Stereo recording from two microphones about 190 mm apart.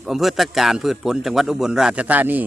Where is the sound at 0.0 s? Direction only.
Centre (ahead or behind).